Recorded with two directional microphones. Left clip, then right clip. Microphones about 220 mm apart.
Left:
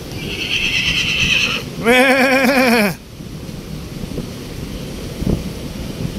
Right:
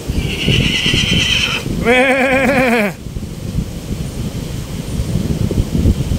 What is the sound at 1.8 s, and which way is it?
Sheep, 15° left (ahead or behind).